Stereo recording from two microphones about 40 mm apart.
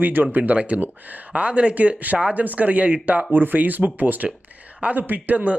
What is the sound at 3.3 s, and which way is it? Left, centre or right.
Speech, right.